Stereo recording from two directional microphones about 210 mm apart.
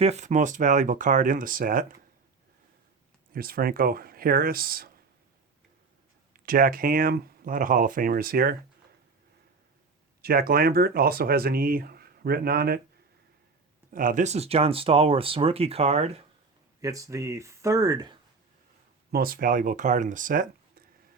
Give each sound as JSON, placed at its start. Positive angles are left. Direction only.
{"t": 0.0, "sound": "speech", "side_deg": -30}
{"t": 3.3, "sound": "speech", "side_deg": -45}
{"t": 6.3, "sound": "speech", "side_deg": -45}
{"t": 10.2, "sound": "speech", "side_deg": -45}
{"t": 13.9, "sound": "speech", "side_deg": -40}
{"t": 16.8, "sound": "speech", "side_deg": -15}
{"t": 19.1, "sound": "speech", "side_deg": -45}